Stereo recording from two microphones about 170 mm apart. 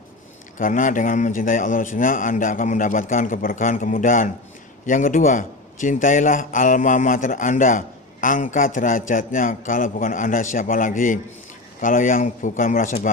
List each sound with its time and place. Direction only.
0.6 s a man's voice: 50° left (ahead or behind)